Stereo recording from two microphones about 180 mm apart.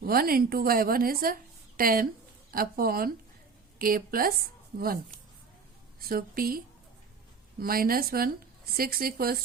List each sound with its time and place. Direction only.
0.0 s a woman's voice: 55° right (ahead or behind)
6.0 s speech: 55° right (ahead or behind)
7.6 s speech: 55° right (ahead or behind)